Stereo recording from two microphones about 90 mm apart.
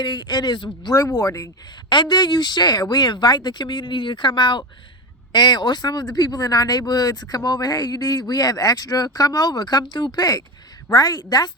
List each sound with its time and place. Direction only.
0.0 s speech: 55° left (ahead or behind)
0.9 s speech: 45° left (ahead or behind)
1.9 s speech: 55° left (ahead or behind)